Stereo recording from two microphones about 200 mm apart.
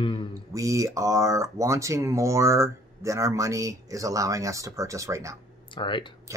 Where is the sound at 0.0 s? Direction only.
25° left (ahead or behind).